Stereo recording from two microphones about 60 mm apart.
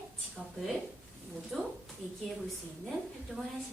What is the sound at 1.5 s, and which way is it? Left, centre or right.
Speech, centre.